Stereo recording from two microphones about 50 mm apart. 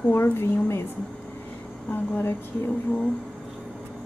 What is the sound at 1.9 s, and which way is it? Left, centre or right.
Speech, left.